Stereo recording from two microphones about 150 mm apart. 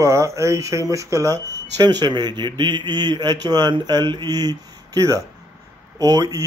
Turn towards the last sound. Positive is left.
turn(degrees=-25)  # may be behind; listen again after turning